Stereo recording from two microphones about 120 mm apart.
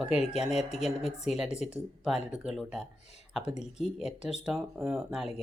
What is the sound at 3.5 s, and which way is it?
Speech, 65° left (ahead or behind).